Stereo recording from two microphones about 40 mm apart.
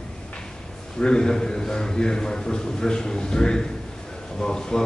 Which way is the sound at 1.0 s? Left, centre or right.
Left.